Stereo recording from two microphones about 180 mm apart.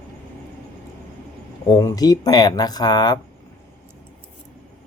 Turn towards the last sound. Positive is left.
turn(degrees=25)  # may be behind; listen again after turning